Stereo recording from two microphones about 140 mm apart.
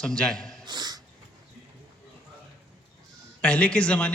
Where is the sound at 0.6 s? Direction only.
30° right (ahead or behind).